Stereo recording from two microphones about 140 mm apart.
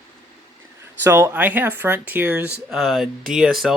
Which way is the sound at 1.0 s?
15° right (ahead or behind).